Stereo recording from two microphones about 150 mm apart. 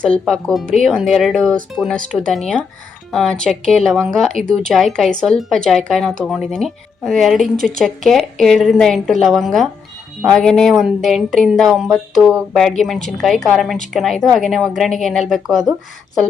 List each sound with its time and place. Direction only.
0.0 s speech: 5° left (ahead or behind)